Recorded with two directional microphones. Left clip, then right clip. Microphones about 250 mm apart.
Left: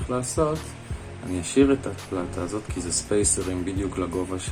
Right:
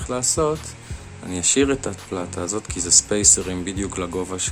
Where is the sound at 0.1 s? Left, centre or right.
Right.